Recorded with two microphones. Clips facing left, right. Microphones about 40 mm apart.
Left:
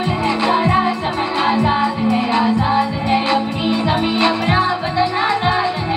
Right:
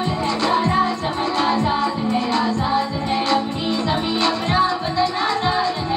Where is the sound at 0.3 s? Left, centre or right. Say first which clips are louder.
Left 3 dB; centre.